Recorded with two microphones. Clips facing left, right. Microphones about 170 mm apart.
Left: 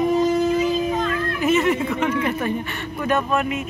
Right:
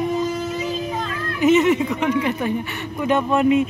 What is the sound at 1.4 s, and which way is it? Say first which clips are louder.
Speech: right 5 dB; 20° right (ahead or behind).